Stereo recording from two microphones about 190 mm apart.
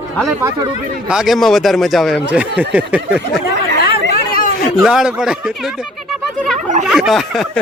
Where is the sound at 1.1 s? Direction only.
Centre (ahead or behind).